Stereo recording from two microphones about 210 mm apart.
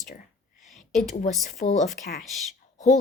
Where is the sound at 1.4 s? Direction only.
35° left (ahead or behind).